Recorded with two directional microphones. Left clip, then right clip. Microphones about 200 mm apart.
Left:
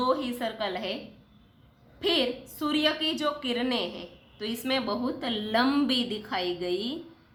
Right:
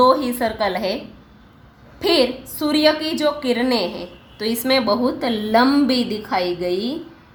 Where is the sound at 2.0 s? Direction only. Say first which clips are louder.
Right 9 dB; 20° right (ahead or behind).